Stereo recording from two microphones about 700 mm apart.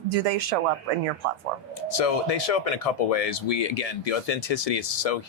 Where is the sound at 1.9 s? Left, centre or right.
Left.